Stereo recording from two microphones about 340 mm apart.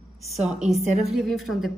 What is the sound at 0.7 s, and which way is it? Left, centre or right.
A woman's voice, centre.